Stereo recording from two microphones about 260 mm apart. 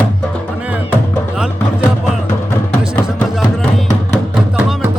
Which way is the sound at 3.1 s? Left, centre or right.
Centre.